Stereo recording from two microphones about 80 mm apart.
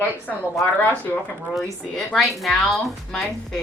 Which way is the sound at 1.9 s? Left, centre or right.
Centre.